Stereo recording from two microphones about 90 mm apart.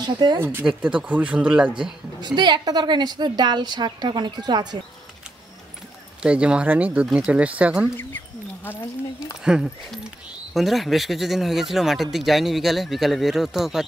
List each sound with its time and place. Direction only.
0.0 s a woman's voice: 55° right (ahead or behind)
0.4 s speech: 25° right (ahead or behind)
0.7 s speech: 10° right (ahead or behind)
2.2 s a woman's voice: 55° right (ahead or behind)
6.2 s speech: 10° right (ahead or behind)
9.4 s speech: 5° right (ahead or behind)